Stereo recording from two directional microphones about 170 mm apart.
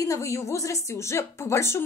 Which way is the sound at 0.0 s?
20° left (ahead or behind).